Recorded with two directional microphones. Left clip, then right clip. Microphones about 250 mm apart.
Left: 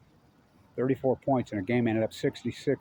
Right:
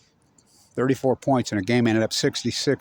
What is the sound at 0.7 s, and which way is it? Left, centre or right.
Speech, right.